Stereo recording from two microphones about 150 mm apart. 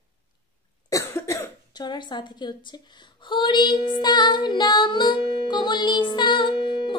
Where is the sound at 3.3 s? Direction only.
35° left (ahead or behind).